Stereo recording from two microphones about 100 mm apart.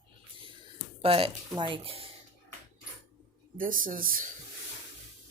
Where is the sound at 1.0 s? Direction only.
70° right (ahead or behind).